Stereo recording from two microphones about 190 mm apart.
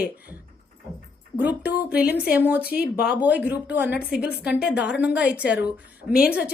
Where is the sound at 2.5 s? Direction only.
55° left (ahead or behind).